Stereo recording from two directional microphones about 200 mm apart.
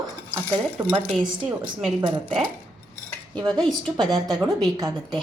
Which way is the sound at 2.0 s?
30° right (ahead or behind).